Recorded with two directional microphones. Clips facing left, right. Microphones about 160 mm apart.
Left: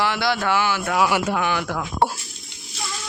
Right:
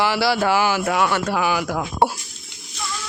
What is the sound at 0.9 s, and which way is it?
Speech, centre (ahead or behind).